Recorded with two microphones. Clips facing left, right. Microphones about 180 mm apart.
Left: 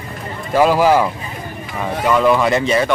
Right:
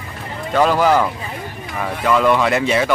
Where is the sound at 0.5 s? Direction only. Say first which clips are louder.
Left 2 dB; 5° left (ahead or behind).